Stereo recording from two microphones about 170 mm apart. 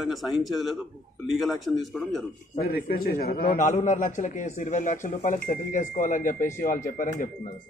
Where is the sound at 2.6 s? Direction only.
60° left (ahead or behind).